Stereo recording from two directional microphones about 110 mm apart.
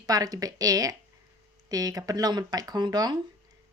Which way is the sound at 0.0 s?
35° right (ahead or behind).